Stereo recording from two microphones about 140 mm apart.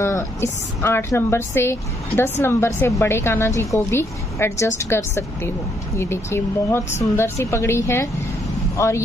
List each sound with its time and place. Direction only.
0.0 s a woman's voice: 20° left (ahead or behind)